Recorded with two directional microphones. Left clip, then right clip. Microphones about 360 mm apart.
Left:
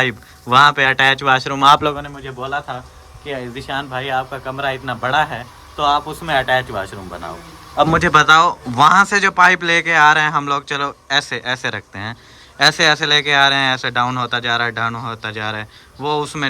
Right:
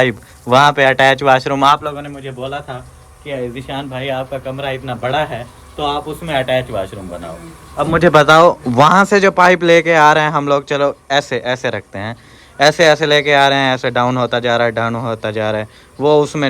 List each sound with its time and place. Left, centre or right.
0.0 s speech: centre
3.2 s a man's voice: centre
6.4 s speech: left
7.9 s speech: centre